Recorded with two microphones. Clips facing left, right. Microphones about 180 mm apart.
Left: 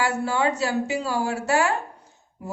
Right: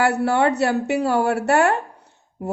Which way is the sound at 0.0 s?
65° right (ahead or behind).